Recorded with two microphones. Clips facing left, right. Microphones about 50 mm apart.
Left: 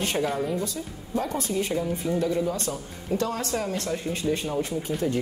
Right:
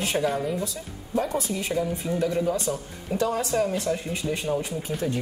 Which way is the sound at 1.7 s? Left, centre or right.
Centre.